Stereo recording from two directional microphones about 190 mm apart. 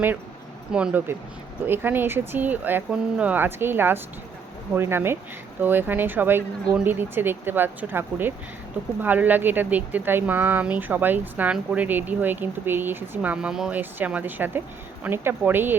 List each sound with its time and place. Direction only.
0.7 s speech: 5° right (ahead or behind)